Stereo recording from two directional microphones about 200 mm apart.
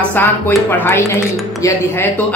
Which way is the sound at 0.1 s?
10° left (ahead or behind).